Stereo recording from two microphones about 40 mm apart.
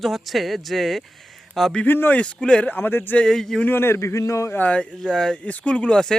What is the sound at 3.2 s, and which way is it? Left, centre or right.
Speech, centre.